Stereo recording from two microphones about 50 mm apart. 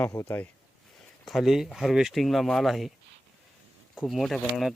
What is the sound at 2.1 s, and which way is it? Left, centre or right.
Speech, centre.